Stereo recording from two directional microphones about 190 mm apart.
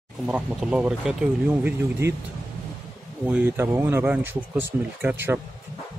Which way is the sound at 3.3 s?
10° right (ahead or behind).